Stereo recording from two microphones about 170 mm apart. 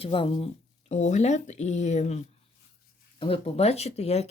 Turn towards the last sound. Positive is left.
turn(degrees=40)  # may be behind; listen again after turning